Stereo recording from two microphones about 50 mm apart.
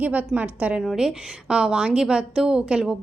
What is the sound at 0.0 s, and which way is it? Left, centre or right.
Speech, right.